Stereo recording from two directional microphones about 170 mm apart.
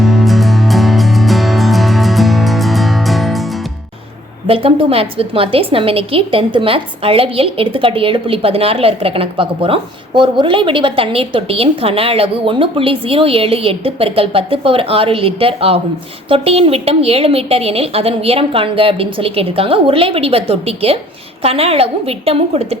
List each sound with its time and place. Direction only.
0.0 s music: centre (ahead or behind)
4.4 s a woman's voice: 35° right (ahead or behind)